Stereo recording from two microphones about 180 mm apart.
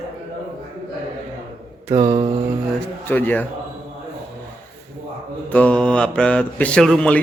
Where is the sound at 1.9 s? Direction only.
40° right (ahead or behind).